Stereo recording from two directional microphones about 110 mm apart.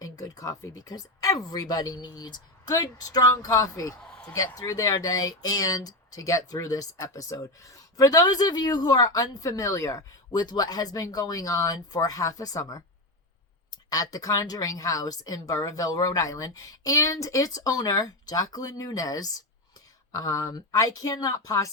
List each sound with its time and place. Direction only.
0.0 s speech: 35° left (ahead or behind)
4.0 s a sound: 10° left (ahead or behind)
4.4 s speech: 30° left (ahead or behind)
13.9 s speech: 35° left (ahead or behind)